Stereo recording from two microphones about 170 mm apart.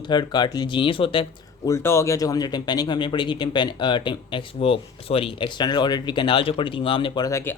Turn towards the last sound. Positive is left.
turn(degrees=20)  # may be behind; listen again after turning